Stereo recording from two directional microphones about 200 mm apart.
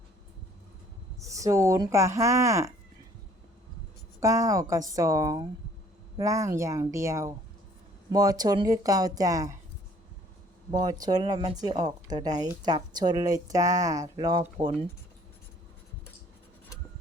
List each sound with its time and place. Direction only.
1.2 s speech: 15° right (ahead or behind)
4.2 s speech: 15° right (ahead or behind)
10.7 s speech: 20° right (ahead or behind)